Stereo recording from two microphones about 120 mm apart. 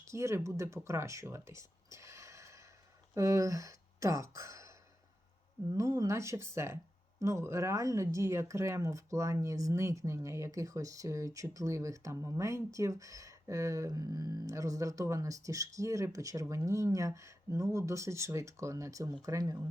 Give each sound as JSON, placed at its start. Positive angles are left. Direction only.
{"t": 0.1, "sound": "speech", "side_deg": -25}
{"t": 5.7, "sound": "speech", "side_deg": -25}